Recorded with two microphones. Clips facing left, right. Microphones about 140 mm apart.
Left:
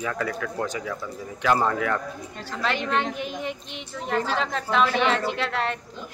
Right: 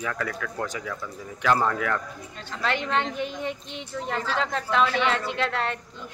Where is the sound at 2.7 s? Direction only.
25° right (ahead or behind).